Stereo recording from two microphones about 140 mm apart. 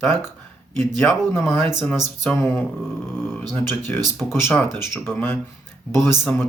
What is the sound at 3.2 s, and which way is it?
Speech, 10° left (ahead or behind).